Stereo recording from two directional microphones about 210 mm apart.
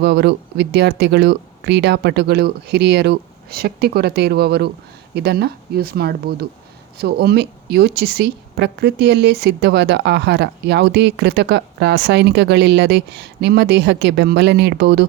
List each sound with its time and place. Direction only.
0.0 s a woman's voice: 55° right (ahead or behind)